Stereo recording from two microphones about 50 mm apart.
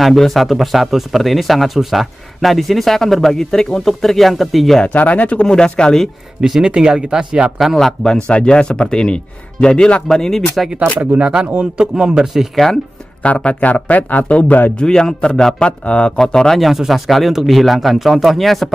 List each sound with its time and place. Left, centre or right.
0.3 s speech: centre
4.8 s speech: left
5.5 s speech: centre
6.4 s speech: centre
7.5 s speech: centre
7.8 s speech: centre
11.1 s speech: right
13.2 s speech: left
14.8 s speech: centre
16.2 s speech: centre
16.5 s speech: centre